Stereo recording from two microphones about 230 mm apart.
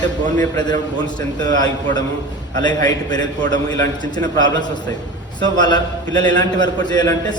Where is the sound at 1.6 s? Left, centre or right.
Centre.